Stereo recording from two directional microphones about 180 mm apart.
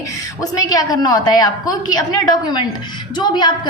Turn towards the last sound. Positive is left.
turn(degrees=25)  # may be behind; listen again after turning